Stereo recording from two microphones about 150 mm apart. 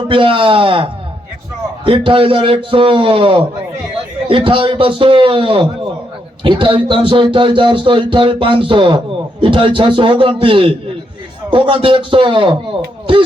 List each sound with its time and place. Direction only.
0.1 s speech: 35° right (ahead or behind)